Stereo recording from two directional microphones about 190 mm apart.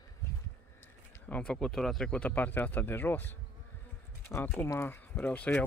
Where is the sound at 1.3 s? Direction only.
5° left (ahead or behind).